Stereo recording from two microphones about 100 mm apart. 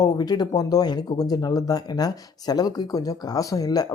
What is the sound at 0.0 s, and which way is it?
Speech, 40° left (ahead or behind).